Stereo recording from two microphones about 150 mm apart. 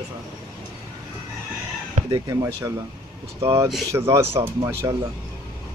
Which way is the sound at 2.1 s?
25° right (ahead or behind).